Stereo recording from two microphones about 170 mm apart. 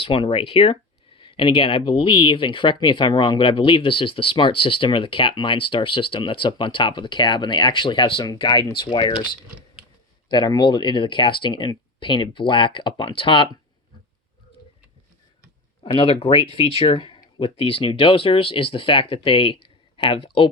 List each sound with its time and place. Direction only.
0.0 s speech: 30° left (ahead or behind)
10.2 s speech: 25° left (ahead or behind)
15.8 s speech: 30° left (ahead or behind)